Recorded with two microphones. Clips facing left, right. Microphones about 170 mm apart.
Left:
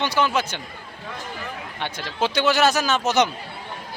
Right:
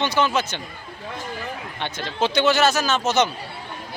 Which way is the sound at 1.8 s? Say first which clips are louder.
Right 1 dB; 10° left (ahead or behind).